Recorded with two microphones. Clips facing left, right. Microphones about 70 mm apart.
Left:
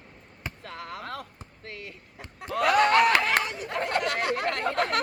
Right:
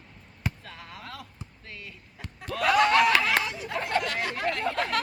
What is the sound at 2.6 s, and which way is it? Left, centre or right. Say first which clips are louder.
Snicker: left 1 dB; left.